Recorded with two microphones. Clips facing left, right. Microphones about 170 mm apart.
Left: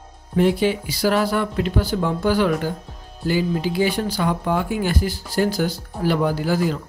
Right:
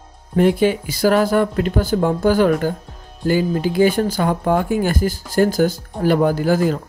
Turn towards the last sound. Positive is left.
turn(degrees=-50)  # may be behind; listen again after turning